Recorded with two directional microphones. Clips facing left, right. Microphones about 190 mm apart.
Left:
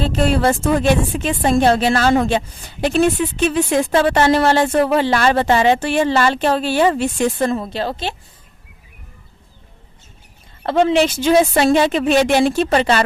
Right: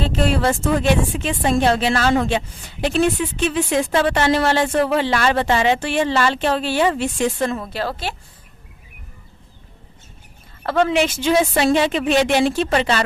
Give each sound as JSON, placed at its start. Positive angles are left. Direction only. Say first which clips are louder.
{"t": 0.1, "sound": "speech", "louder": "left 3 dB", "side_deg": 40}
{"t": 7.6, "sound": "a woman's voice", "louder": "left 2 dB", "side_deg": 25}
{"t": 10.6, "sound": "a woman's voice", "louder": "left 3 dB", "side_deg": 25}
{"t": 11.0, "sound": "a woman's voice", "louder": "left 4 dB", "side_deg": 40}